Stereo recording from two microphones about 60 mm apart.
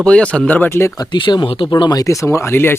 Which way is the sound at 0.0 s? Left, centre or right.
Centre.